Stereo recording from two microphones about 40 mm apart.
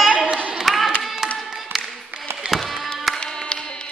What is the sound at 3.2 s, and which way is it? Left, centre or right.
Music, centre.